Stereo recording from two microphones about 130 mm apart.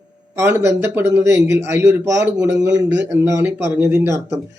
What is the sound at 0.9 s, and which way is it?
Speech, 15° right (ahead or behind).